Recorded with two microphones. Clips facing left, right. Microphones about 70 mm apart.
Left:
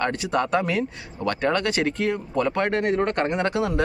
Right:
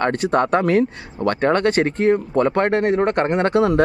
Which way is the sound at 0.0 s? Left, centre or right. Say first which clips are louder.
Right 6 dB; right.